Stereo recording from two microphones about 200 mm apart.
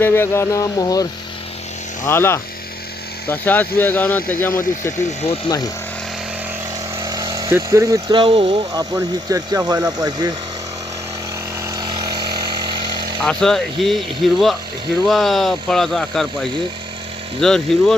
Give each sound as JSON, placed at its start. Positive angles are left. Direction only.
{"t": 0.0, "sound": "speech", "side_deg": 10}
{"t": 2.0, "sound": "speech", "side_deg": 10}
{"t": 7.0, "sound": "speech", "side_deg": -20}
{"t": 8.7, "sound": "speech", "side_deg": -15}
{"t": 11.6, "sound": "vehicle", "side_deg": -20}
{"t": 13.2, "sound": "speech", "side_deg": 0}